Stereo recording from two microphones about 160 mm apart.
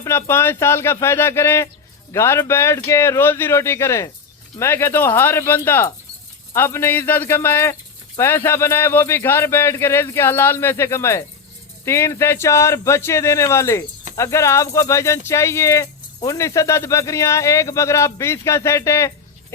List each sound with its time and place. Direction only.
0.0 s speech: 15° left (ahead or behind)